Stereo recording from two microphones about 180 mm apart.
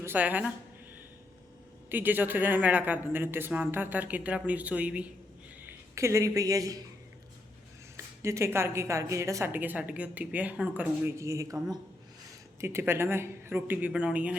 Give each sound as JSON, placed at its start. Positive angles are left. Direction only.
{"t": 0.0, "sound": "a woman's voice", "side_deg": -10}
{"t": 1.9, "sound": "a woman's voice", "side_deg": -10}
{"t": 7.9, "sound": "a woman's voice", "side_deg": -15}
{"t": 12.5, "sound": "a woman's voice", "side_deg": -15}